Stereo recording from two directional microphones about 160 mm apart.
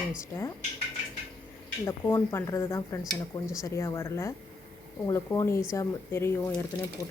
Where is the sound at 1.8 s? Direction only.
15° left (ahead or behind).